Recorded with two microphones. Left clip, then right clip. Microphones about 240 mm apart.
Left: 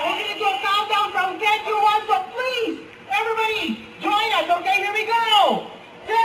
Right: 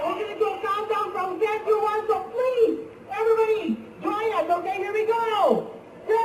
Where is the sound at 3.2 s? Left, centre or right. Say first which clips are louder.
Right 1 dB; centre.